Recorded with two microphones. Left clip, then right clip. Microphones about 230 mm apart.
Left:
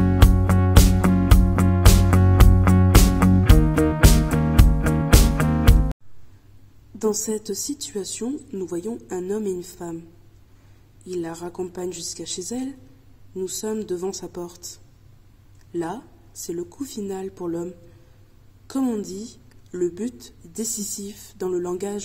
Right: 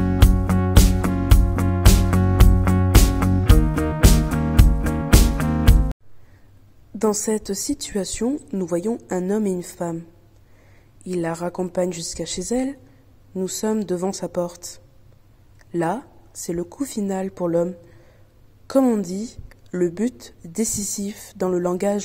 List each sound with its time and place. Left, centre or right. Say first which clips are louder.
0.0 s music: left 1 dB; centre
7.0 s a woman's voice: right 3 dB; right
11.1 s a woman's voice: right 5 dB; right
18.7 s a woman's voice: right 7 dB; right